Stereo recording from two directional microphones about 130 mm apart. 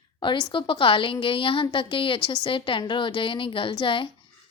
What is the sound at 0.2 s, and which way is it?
A woman's voice, 40° left (ahead or behind).